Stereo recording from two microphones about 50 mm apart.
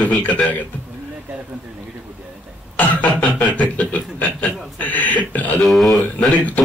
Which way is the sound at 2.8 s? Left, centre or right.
Left.